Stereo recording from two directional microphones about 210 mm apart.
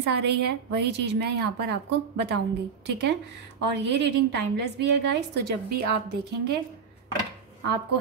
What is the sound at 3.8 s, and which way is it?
A woman's voice, 55° right (ahead or behind).